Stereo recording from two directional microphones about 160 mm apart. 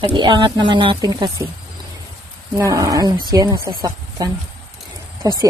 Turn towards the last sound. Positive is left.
turn(degrees=-25)  # may be behind; listen again after turning